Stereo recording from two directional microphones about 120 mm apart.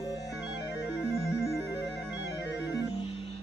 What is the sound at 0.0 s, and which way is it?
Music, 30° left (ahead or behind).